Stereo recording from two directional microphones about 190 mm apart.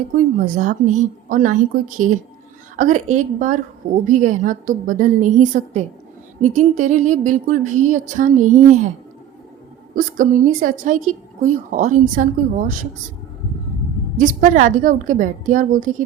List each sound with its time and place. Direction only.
0.1 s a woman's voice: 40° right (ahead or behind)
2.7 s a sound: 45° right (ahead or behind)
9.9 s a woman's voice: 45° right (ahead or behind)
14.2 s a woman's voice: 45° right (ahead or behind)